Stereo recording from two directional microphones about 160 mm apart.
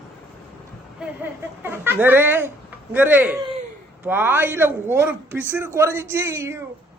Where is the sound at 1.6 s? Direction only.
15° right (ahead or behind).